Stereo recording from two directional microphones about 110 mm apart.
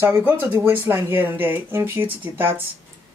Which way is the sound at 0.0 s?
20° right (ahead or behind).